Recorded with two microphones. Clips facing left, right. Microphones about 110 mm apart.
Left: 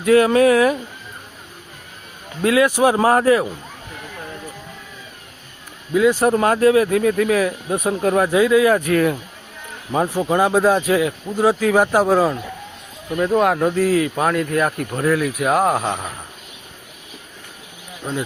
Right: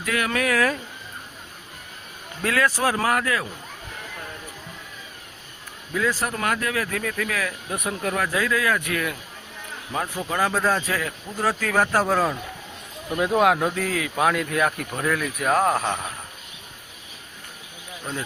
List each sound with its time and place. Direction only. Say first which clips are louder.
0.0 s speech: left 12 dB; 30° left (ahead or behind)
2.4 s speech: left 7 dB; 15° left (ahead or behind)
5.9 s speech: left 10 dB; 20° left (ahead or behind)
8.7 s speech: left 9 dB; 35° left (ahead or behind); by 12.4 s 10° left (ahead or behind)
13.1 s speech: left 3 dB; 10° right (ahead or behind); by 16.0 s 10° left (ahead or behind)